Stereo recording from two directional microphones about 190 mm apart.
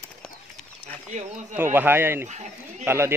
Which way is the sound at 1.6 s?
10° right (ahead or behind).